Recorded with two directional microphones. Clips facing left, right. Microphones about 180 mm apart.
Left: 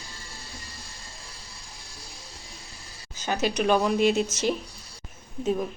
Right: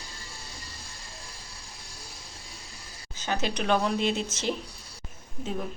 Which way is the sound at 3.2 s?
10° left (ahead or behind).